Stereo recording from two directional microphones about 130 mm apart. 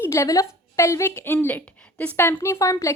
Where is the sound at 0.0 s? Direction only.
20° left (ahead or behind).